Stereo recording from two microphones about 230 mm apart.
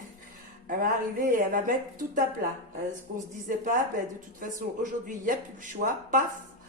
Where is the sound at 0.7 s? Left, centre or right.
Right.